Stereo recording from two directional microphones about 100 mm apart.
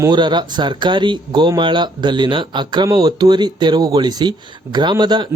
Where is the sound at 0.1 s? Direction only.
50° right (ahead or behind).